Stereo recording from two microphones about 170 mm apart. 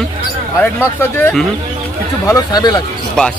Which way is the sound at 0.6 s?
10° left (ahead or behind).